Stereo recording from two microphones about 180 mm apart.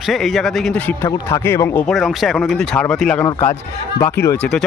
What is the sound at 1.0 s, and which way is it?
Speech, 15° left (ahead or behind).